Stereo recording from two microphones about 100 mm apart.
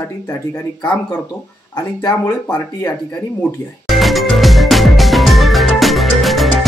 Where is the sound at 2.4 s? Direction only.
25° left (ahead or behind).